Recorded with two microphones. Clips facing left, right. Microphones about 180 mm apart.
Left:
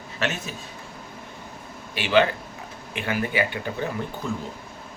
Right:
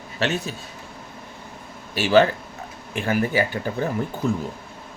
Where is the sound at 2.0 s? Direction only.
40° right (ahead or behind).